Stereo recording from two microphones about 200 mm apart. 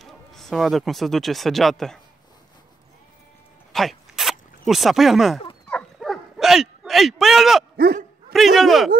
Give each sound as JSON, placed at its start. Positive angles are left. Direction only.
{"t": 0.0, "sound": "speech", "side_deg": 0}
{"t": 3.7, "sound": "a sound", "side_deg": 0}
{"t": 5.7, "sound": "bow-wow", "side_deg": 5}
{"t": 7.7, "sound": "speech", "side_deg": -50}
{"t": 8.3, "sound": "a man's voice", "side_deg": 0}